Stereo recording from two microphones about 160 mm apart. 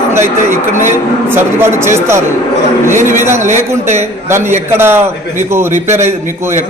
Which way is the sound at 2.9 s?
55° right (ahead or behind).